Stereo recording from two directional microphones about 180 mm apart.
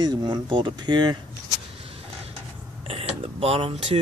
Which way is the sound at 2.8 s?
30° right (ahead or behind).